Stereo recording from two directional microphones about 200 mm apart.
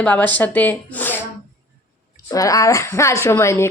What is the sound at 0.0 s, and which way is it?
A woman's voice, 10° left (ahead or behind).